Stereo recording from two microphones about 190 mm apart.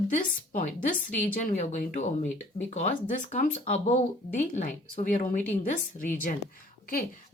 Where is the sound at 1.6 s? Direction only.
40° left (ahead or behind).